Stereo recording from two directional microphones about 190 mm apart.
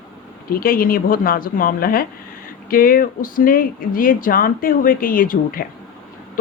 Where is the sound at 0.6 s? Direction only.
50° left (ahead or behind).